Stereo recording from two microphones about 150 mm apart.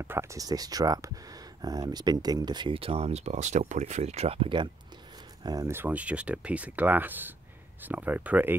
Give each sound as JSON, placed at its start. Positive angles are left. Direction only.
{"t": 0.0, "sound": "speech", "side_deg": -15}
{"t": 5.4, "sound": "speech", "side_deg": -25}